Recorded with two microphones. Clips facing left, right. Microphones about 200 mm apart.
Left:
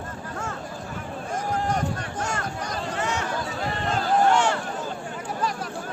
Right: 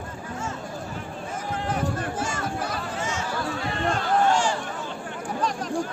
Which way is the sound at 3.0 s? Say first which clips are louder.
Left 4 dB; 65° left (ahead or behind).